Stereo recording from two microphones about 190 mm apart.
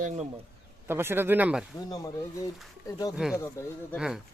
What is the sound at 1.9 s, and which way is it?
Speech, 20° left (ahead or behind).